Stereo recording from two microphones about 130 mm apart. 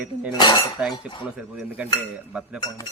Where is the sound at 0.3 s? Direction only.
35° left (ahead or behind).